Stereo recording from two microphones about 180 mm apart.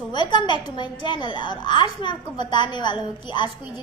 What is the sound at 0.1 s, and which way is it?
A woman's voice, 25° left (ahead or behind).